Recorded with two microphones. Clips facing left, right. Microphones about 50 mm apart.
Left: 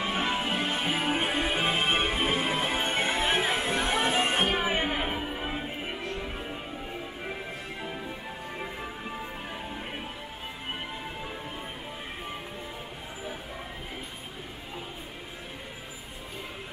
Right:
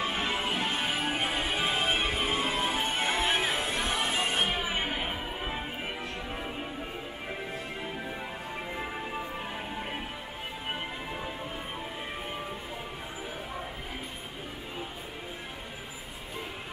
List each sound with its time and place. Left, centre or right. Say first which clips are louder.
0.0 s music: left 2 dB; centre; by 3.0 s left
3.1 s music: left 1 dB; left